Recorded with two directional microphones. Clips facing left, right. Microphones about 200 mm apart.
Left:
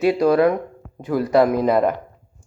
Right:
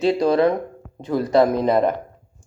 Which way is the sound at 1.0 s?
10° left (ahead or behind).